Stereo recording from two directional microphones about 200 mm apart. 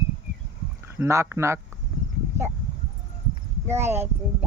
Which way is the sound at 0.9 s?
15° right (ahead or behind).